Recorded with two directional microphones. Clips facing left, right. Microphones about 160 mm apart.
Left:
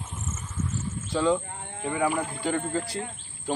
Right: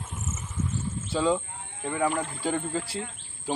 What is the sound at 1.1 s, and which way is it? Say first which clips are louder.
Speech: left 1 dB; 5° right (ahead or behind).